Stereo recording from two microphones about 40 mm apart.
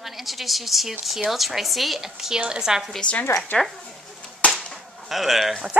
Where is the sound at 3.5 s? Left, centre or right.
Left.